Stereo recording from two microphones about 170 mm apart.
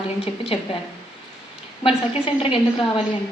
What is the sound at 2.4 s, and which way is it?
Speech, 30° left (ahead or behind).